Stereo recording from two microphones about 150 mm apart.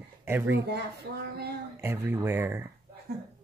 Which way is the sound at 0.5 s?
90° right.